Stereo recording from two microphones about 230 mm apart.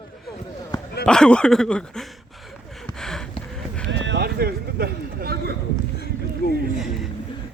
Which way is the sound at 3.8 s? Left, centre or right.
Right.